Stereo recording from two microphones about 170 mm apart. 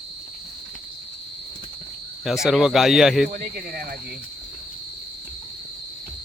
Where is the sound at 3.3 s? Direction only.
55° right (ahead or behind).